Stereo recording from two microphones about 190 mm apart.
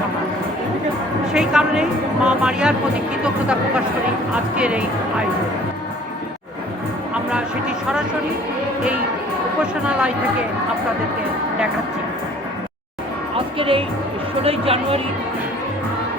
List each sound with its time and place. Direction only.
1.3 s speech: 5° right (ahead or behind)
4.5 s speech: 5° right (ahead or behind)
7.1 s music: 5° right (ahead or behind)
9.6 s speech: 5° right (ahead or behind)
13.3 s music: 30° right (ahead or behind)
14.4 s speech: 30° right (ahead or behind)